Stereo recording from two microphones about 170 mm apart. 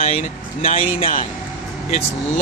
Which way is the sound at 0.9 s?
60° left (ahead or behind).